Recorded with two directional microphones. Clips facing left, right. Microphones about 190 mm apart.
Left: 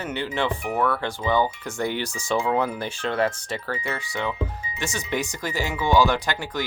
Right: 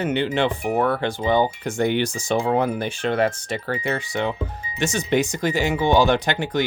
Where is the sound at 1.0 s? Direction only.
20° right (ahead or behind).